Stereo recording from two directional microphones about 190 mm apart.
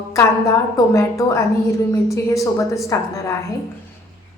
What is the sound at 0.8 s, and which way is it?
A woman's voice, 15° left (ahead or behind).